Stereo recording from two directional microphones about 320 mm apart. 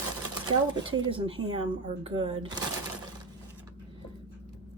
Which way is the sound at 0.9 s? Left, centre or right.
Centre.